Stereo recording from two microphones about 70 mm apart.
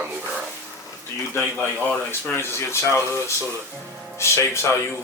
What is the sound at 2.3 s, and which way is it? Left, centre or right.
Speech, left.